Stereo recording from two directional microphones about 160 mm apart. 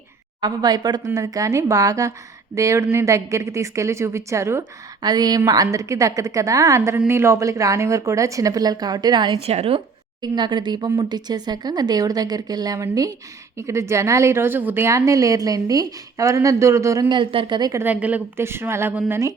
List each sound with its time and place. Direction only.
0.4 s a woman's voice: 25° right (ahead or behind)
9.4 s a woman's voice: 40° right (ahead or behind); by 17.2 s 20° right (ahead or behind)
17.2 s a woman's voice: 30° right (ahead or behind); by 19.3 s 15° right (ahead or behind)